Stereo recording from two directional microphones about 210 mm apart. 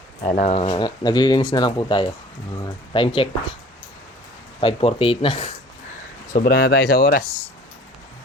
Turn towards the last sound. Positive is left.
turn(degrees=45)  # may be behind; listen again after turning